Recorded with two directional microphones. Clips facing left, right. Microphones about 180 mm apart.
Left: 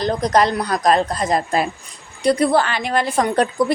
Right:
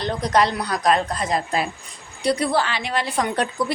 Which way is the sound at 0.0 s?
40° left (ahead or behind).